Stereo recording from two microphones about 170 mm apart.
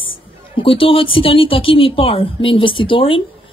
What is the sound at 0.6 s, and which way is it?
A woman's voice, 30° left (ahead or behind).